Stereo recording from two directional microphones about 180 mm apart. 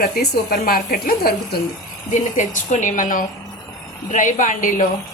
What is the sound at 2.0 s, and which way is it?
Speech, 45° left (ahead or behind).